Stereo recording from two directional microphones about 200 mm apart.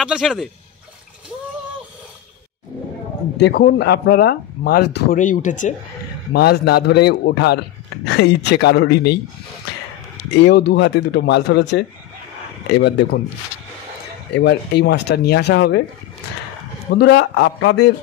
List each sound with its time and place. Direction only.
0.0 s speech: centre (ahead or behind)
3.3 s speech: 55° left (ahead or behind)
5.2 s speech: 40° left (ahead or behind)
6.3 s speech: 50° left (ahead or behind)
10.3 s speech: 55° left (ahead or behind)
14.3 s speech: 60° left (ahead or behind)
16.9 s speech: 55° left (ahead or behind)